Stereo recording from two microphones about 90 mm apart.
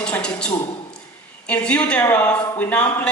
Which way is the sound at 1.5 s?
15° left (ahead or behind).